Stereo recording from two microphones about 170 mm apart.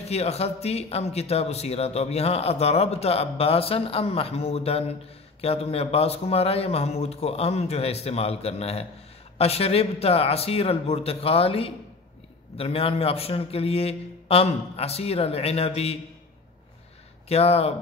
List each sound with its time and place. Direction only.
0.0 s speech: 35° left (ahead or behind)
17.3 s speech: 35° left (ahead or behind)